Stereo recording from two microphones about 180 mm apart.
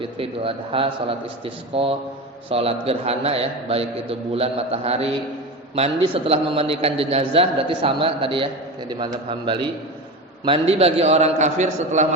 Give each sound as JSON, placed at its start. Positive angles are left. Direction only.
{"t": 0.0, "sound": "a man's voice", "side_deg": -30}